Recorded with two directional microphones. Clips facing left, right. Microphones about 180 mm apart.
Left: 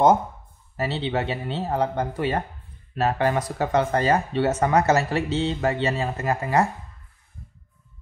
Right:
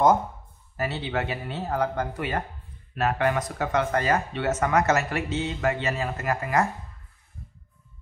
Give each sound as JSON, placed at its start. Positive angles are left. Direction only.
{"t": 0.7, "sound": "speech", "side_deg": 30}